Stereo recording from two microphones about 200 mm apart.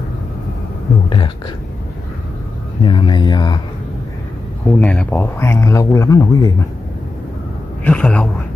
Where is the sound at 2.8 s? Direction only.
25° left (ahead or behind).